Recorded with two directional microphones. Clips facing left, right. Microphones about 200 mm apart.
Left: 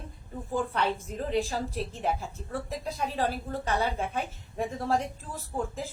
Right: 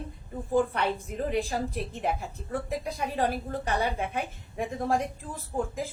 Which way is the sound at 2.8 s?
15° right (ahead or behind).